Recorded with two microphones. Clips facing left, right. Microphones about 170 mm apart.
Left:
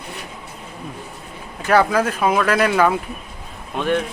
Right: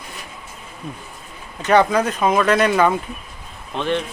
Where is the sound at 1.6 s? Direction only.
5° left (ahead or behind).